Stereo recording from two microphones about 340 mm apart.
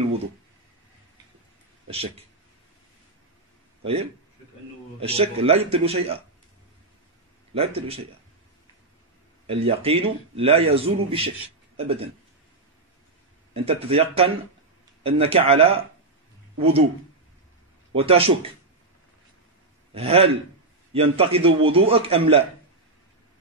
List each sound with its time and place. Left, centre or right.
1.9 s a man's voice: centre
3.8 s a man's voice: centre
7.5 s a man's voice: centre
9.5 s a man's voice: centre
13.5 s speech: centre
15.0 s a man's voice: centre
17.9 s a man's voice: centre
19.9 s a man's voice: centre